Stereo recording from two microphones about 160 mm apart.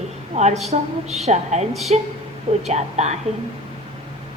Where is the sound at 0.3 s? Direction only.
45° right (ahead or behind).